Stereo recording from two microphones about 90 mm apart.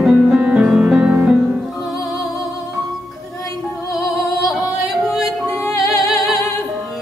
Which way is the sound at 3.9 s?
40° left (ahead or behind).